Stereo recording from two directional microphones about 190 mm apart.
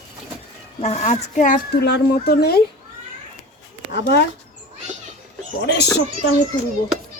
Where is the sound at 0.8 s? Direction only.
35° left (ahead or behind).